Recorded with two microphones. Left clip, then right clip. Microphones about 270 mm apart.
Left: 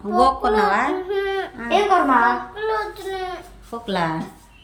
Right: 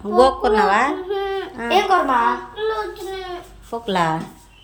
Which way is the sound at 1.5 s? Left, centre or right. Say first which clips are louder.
Right 1 dB; centre.